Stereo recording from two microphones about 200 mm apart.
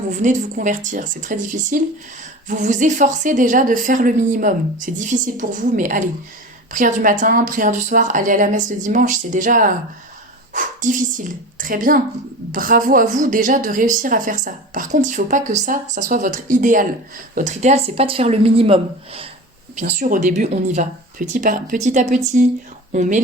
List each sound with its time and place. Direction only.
0.1 s a woman's voice: 40° right (ahead or behind)
19.7 s a woman's voice: 40° right (ahead or behind)